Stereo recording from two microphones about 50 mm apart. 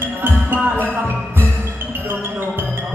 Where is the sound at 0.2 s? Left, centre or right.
Right.